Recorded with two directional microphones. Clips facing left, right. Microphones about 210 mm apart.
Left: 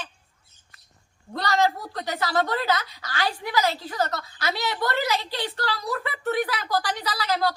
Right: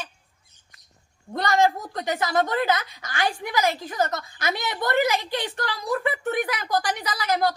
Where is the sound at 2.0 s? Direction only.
20° right (ahead or behind).